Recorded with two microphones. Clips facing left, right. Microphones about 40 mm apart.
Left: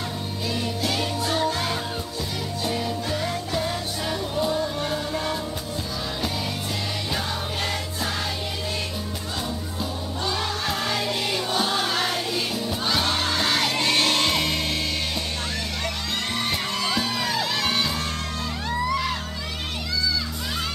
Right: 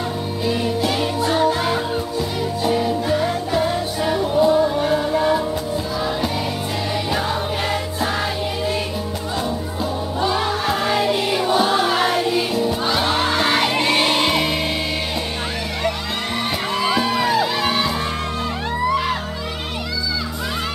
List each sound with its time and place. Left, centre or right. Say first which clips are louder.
0.5 s music: right 6 dB; centre
10.2 s music: right 7 dB; centre
16.7 s music: right 7 dB; centre